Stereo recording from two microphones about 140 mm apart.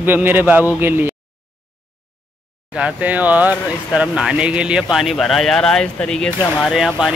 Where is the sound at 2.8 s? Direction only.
10° right (ahead or behind).